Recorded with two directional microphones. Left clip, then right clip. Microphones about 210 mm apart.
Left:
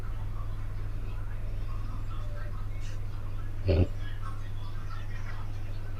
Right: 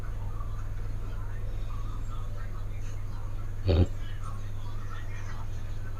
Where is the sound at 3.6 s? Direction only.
20° right (ahead or behind).